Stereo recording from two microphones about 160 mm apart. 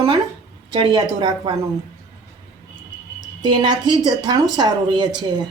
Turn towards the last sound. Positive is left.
turn(degrees=-25)  # may be behind; listen again after turning